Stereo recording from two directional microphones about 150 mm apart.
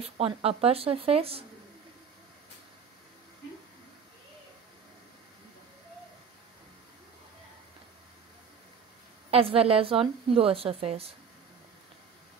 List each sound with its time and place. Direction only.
0.2 s a woman's voice: 40° right (ahead or behind)
9.3 s a woman's voice: 40° right (ahead or behind)